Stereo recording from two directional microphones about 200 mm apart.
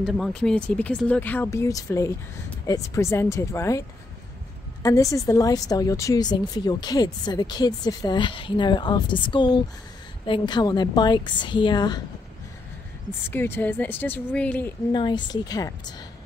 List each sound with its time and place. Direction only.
0.0 s speech: centre (ahead or behind)
4.8 s a woman's voice: 15° left (ahead or behind)
13.3 s speech: 10° left (ahead or behind)
14.9 s a woman's voice: 20° left (ahead or behind)